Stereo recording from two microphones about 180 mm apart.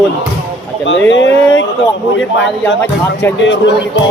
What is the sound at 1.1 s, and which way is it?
Speech, 90° left.